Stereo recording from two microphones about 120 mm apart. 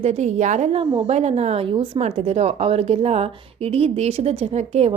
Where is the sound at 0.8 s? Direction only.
55° right (ahead or behind).